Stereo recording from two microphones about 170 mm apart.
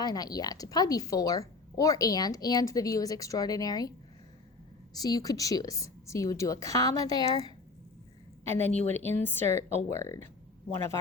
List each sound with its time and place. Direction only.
0.0 s a woman's voice: 20° left (ahead or behind)
4.9 s a woman's voice: 20° left (ahead or behind)
8.4 s speech: 10° left (ahead or behind)